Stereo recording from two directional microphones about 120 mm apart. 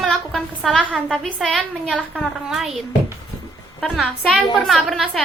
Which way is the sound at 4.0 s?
Centre (ahead or behind).